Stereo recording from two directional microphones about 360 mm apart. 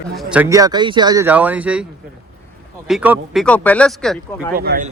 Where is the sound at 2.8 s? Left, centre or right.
Centre.